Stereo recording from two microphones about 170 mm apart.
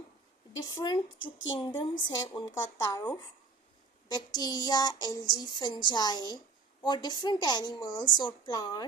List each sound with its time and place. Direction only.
0.6 s child singing: 25° left (ahead or behind)